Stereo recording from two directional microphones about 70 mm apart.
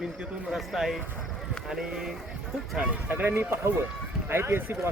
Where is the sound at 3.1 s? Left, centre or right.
Right.